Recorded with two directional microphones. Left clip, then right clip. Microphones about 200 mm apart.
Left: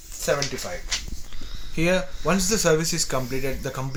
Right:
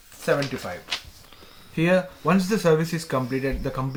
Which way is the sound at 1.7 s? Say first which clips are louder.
Right 2 dB; 35° left (ahead or behind).